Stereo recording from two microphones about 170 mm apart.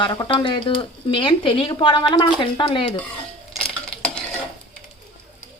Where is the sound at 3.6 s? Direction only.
5° left (ahead or behind).